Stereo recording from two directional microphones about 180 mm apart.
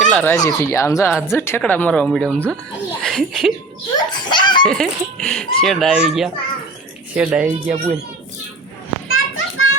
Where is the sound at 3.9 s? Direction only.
25° left (ahead or behind).